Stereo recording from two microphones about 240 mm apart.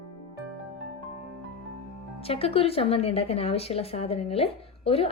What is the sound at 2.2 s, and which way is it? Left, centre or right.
Speech, left.